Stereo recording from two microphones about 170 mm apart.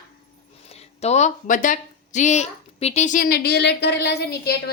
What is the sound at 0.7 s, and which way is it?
Speech, 40° left (ahead or behind).